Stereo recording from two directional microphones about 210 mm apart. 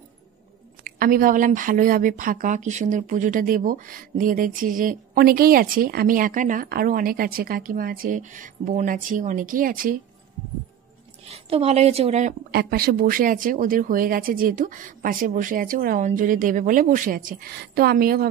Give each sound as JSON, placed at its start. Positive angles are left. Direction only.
{"t": 0.8, "sound": "speech", "side_deg": -45}
{"t": 11.2, "sound": "a woman's voice", "side_deg": -30}
{"t": 12.4, "sound": "speech", "side_deg": -50}